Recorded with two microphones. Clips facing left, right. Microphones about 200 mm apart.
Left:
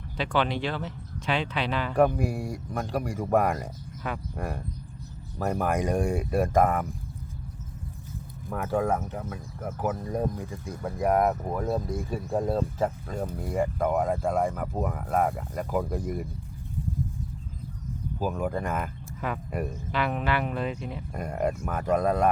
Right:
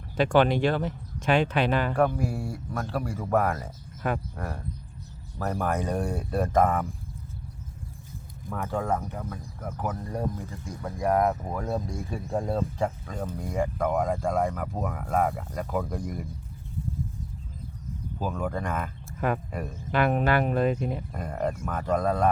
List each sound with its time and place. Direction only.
0.2 s speech: 45° right (ahead or behind)
2.0 s speech: 15° left (ahead or behind)
4.0 s speech: 45° right (ahead or behind)
4.4 s speech: 15° left (ahead or behind)
8.4 s speech: 10° left (ahead or behind)
18.2 s speech: 5° left (ahead or behind)
19.2 s speech: 50° right (ahead or behind)
21.1 s speech: 10° left (ahead or behind)